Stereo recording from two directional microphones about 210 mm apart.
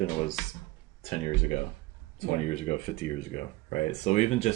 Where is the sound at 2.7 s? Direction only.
30° left (ahead or behind).